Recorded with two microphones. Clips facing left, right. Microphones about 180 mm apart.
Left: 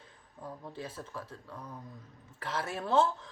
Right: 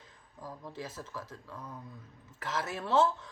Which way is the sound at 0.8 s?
30° left (ahead or behind).